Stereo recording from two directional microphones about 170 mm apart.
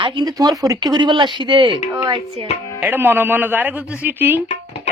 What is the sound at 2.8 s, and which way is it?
A man's voice, 10° right (ahead or behind).